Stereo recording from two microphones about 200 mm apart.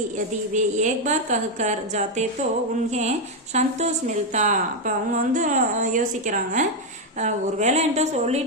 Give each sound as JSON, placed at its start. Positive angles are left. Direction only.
{"t": 0.5, "sound": "a woman's voice", "side_deg": -35}